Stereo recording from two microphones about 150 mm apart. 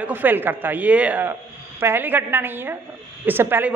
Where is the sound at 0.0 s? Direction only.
10° right (ahead or behind).